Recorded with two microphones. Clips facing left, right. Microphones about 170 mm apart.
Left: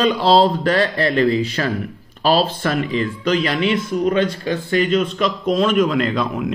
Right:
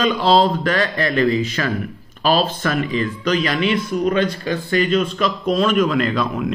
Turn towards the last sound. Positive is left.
turn(degrees=20)  # may be behind; listen again after turning